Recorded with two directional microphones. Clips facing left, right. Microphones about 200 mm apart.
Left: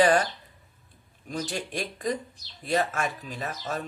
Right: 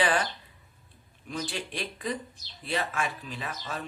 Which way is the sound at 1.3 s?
45° left (ahead or behind).